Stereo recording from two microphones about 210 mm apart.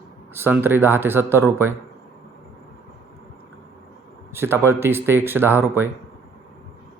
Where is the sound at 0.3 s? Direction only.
10° right (ahead or behind).